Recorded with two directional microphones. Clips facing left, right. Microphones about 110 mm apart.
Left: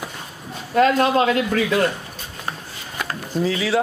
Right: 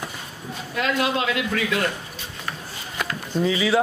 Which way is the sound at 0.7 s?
40° left (ahead or behind).